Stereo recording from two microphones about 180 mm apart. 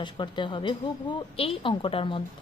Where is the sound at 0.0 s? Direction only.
25° left (ahead or behind).